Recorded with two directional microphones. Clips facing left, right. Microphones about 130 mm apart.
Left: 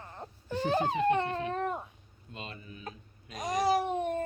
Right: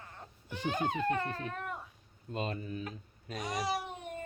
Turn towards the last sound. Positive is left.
turn(degrees=45)  # may be behind; listen again after turning